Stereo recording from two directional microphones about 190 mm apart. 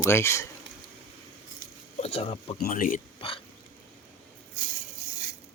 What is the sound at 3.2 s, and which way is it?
Hiccup, 30° left (ahead or behind).